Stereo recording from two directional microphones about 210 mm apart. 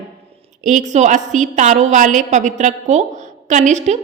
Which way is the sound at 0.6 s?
35° right (ahead or behind).